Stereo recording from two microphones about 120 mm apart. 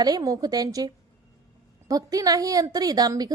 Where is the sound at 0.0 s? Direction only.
35° right (ahead or behind).